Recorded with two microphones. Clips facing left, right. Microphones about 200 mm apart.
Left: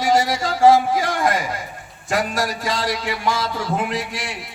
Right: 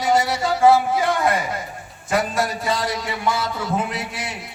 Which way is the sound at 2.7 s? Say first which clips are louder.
Left 1 dB; 85° left.